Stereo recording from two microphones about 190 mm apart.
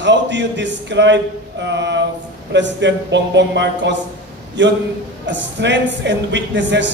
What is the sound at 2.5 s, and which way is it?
Speech, 70° right (ahead or behind).